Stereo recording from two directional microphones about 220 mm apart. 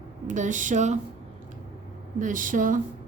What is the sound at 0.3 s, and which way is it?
Speech, 35° right (ahead or behind).